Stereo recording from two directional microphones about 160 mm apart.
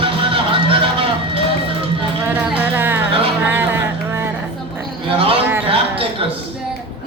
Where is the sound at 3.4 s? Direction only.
15° right (ahead or behind).